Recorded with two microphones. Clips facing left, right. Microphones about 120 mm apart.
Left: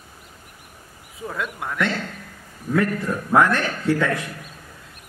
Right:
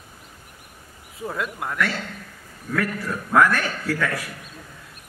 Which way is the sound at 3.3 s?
20° left (ahead or behind).